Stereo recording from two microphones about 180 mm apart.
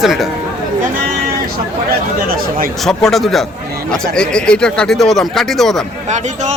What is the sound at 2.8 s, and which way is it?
Speech, 5° left (ahead or behind).